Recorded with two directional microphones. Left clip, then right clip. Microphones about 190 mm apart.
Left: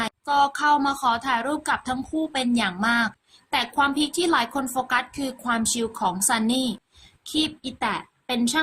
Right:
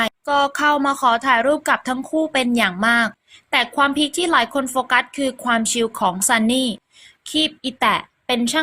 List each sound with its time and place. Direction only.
0.0 s speech: 20° right (ahead or behind)